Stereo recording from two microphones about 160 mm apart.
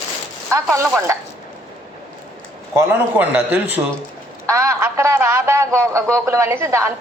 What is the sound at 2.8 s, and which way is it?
Speech, 10° right (ahead or behind).